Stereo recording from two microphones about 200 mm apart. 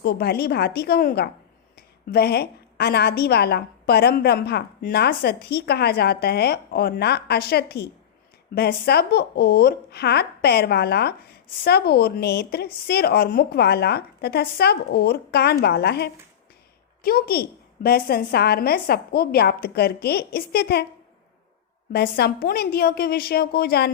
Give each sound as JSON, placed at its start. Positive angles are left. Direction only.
{"t": 0.0, "sound": "speech", "side_deg": 50}
{"t": 21.9, "sound": "speech", "side_deg": 50}